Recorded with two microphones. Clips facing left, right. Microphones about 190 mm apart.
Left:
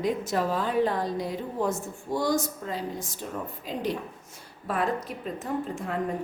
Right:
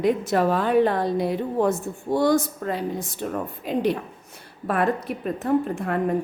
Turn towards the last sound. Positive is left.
turn(degrees=-60)  # may be behind; listen again after turning